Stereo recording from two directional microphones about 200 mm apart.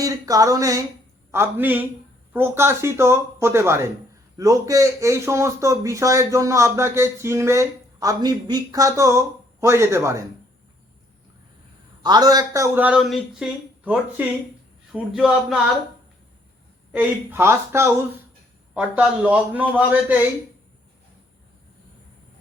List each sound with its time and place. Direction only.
0.0 s speech: 15° right (ahead or behind)
12.0 s a man's voice: 20° right (ahead or behind); by 15.5 s 5° right (ahead or behind)
16.9 s speech: 10° right (ahead or behind)